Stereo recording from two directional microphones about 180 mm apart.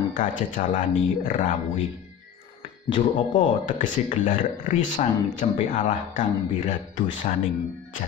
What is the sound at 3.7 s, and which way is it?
Speech, 45° left (ahead or behind).